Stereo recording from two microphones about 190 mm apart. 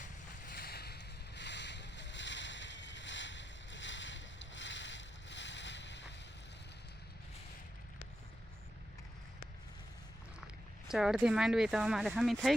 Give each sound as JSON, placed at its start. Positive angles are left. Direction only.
{"t": 0.0, "sound": "boat", "side_deg": 50}
{"t": 10.4, "sound": "speech", "side_deg": -5}